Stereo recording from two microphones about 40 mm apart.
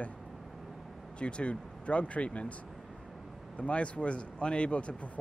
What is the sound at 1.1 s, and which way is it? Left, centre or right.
Speech, left.